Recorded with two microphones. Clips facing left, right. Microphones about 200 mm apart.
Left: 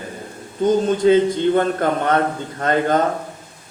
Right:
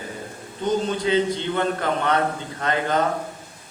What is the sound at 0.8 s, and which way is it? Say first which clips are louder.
Speech: left 9 dB; 50° left (ahead or behind).